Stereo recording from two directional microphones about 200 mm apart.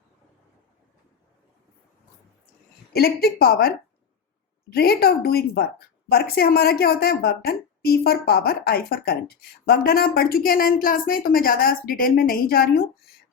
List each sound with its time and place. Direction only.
2.9 s a woman's voice: 50° left (ahead or behind)
4.7 s a woman's voice: 50° left (ahead or behind)